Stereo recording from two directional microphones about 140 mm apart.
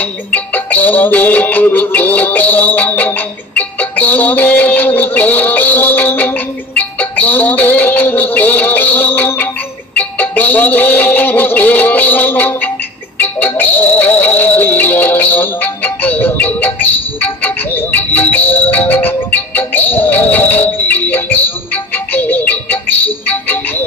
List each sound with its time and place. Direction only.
0.0 s music: 10° left (ahead or behind)